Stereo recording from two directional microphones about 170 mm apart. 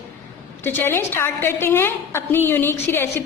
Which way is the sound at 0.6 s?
10° left (ahead or behind).